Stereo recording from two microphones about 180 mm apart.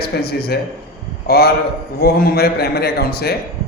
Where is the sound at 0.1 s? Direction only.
65° left (ahead or behind).